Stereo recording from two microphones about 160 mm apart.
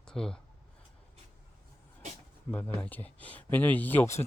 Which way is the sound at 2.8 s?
10° left (ahead or behind).